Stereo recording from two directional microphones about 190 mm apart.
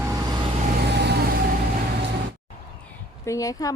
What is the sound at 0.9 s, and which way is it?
Vehicle, 60° right (ahead or behind).